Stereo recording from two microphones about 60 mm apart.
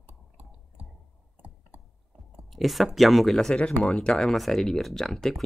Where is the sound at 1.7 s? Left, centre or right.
Right.